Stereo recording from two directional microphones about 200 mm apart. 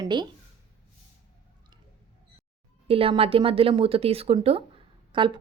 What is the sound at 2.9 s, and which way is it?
Speech, 30° right (ahead or behind).